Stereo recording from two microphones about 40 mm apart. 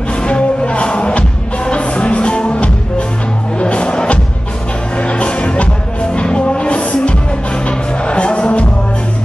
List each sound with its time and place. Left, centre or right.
0.2 s music: left